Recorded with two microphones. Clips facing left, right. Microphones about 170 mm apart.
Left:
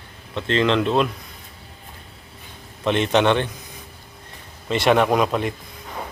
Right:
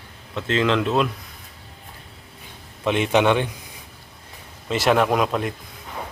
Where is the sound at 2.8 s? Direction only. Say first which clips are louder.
Even; 10° right (ahead or behind).